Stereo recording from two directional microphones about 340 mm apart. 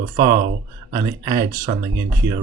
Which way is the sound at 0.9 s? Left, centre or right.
Centre.